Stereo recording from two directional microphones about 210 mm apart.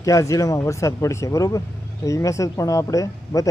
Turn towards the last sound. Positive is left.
turn(degrees=15)  # may be behind; listen again after turning